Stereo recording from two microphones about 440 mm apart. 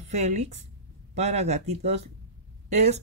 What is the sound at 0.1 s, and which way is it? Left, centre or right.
Speech, centre.